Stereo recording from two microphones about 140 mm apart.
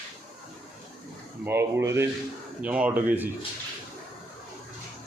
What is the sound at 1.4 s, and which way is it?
Speech, 15° right (ahead or behind).